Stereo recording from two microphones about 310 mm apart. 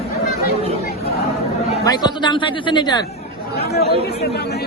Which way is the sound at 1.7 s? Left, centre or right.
Centre.